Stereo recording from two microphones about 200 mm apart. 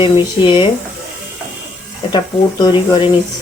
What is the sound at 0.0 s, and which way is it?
Speech, 25° left (ahead or behind).